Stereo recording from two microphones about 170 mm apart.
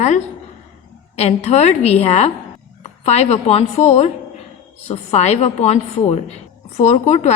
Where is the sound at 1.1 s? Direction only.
40° left (ahead or behind).